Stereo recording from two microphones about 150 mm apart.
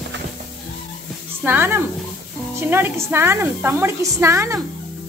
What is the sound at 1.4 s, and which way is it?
Speech, 15° right (ahead or behind).